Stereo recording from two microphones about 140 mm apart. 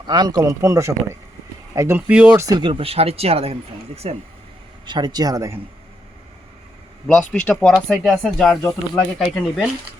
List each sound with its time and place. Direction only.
0.1 s speech: 30° right (ahead or behind)
2.0 s speech: 10° right (ahead or behind)
2.6 s speech: 40° right (ahead or behind)
4.9 s speech: 30° right (ahead or behind)
7.1 s speech: 10° left (ahead or behind)